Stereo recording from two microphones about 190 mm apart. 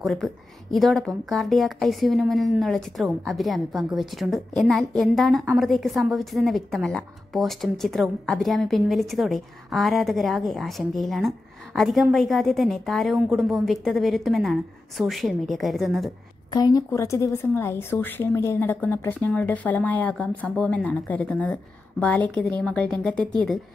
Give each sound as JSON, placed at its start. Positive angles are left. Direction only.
{"t": 0.0, "sound": "a woman's voice", "side_deg": 0}
{"t": 16.4, "sound": "a woman's voice", "side_deg": 20}
{"t": 22.6, "sound": "a woman's voice", "side_deg": 5}